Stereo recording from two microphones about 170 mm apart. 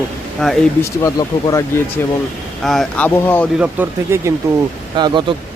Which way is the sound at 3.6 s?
10° right (ahead or behind).